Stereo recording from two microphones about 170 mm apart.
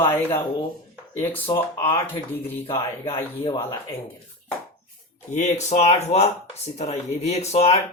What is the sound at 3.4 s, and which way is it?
Speech, 30° left (ahead or behind).